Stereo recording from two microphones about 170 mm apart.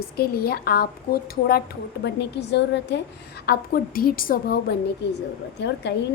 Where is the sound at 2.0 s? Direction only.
90° left.